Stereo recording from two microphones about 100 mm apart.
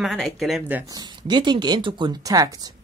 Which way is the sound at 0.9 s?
45° right (ahead or behind).